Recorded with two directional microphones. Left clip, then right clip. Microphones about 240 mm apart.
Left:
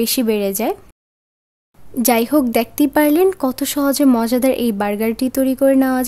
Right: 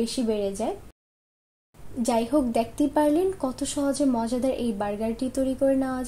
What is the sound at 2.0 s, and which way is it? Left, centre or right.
A woman's voice, left.